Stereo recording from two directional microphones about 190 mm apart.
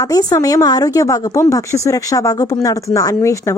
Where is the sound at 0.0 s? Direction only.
20° left (ahead or behind).